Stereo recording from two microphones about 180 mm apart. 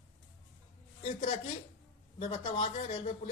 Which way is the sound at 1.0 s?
30° left (ahead or behind).